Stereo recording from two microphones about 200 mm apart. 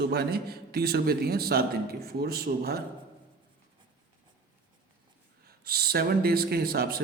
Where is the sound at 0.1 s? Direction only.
50° right (ahead or behind).